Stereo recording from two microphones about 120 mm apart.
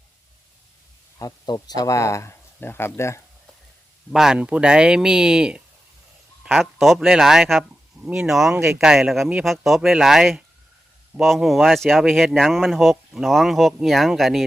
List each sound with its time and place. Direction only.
1.2 s speech: 35° left (ahead or behind)
4.1 s speech: 5° right (ahead or behind)